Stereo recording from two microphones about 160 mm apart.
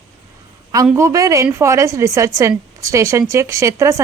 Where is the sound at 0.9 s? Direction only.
20° right (ahead or behind).